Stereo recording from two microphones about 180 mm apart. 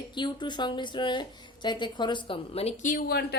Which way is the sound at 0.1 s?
25° left (ahead or behind).